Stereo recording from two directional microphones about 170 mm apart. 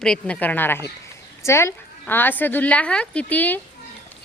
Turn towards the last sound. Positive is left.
turn(degrees=10)  # may be behind; listen again after turning